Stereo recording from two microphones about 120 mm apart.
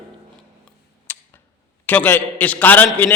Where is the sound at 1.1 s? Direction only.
15° left (ahead or behind).